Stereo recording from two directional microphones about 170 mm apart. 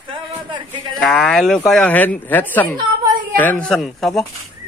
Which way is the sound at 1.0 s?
5° left (ahead or behind).